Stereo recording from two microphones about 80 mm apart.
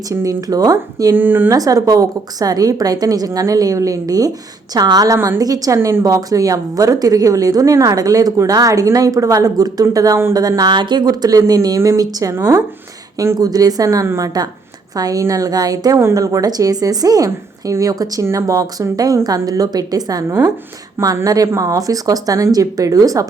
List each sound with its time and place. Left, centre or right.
0.1 s a woman's voice: right
1.1 s speech: right
1.5 s a woman's voice: right
10.6 s a woman's voice: right
13.4 s a woman's voice: right
21.2 s a woman's voice: right